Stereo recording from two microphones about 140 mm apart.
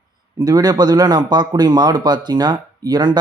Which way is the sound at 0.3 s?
25° right (ahead or behind).